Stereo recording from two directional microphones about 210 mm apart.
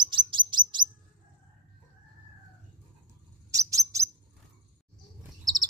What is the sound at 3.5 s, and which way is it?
Bird, 15° right (ahead or behind).